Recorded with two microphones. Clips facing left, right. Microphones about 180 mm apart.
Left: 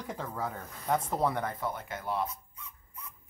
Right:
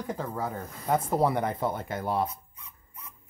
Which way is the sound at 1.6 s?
30° right (ahead or behind).